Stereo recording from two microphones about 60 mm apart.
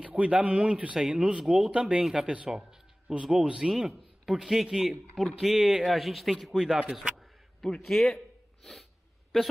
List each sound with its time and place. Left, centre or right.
0.0 s speech: right
0.9 s speech: centre